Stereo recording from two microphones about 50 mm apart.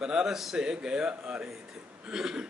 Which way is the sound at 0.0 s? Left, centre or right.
Centre.